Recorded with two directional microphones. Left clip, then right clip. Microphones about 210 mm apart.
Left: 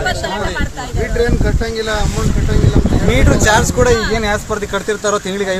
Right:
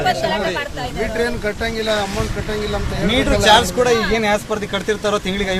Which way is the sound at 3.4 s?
25° left (ahead or behind).